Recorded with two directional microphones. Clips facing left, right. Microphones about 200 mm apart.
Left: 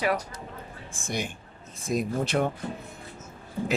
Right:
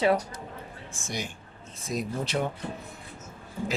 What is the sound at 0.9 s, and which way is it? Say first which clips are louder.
Speech: left 4 dB; 55° left (ahead or behind).